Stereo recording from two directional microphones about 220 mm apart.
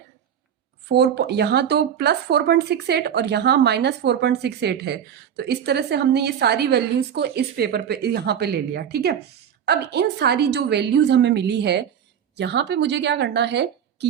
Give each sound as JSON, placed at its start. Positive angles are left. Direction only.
{"t": 0.9, "sound": "speech", "side_deg": -50}